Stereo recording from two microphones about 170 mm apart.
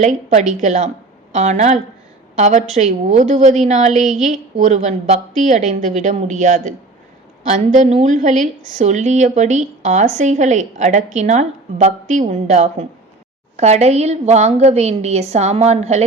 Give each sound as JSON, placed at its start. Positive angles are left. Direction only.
{"t": 0.6, "sound": "a woman's voice", "side_deg": -45}